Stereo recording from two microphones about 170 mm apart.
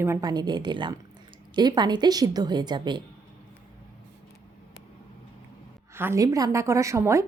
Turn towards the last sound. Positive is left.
turn(degrees=-15)  # may be behind; listen again after turning